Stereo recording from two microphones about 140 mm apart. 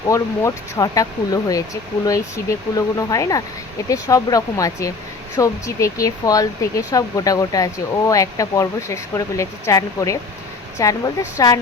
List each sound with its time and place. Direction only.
0.1 s speech: 25° left (ahead or behind)